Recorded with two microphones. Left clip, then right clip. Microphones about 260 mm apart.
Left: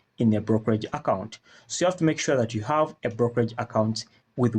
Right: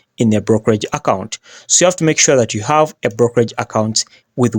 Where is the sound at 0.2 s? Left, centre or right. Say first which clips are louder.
Right 10 dB; right.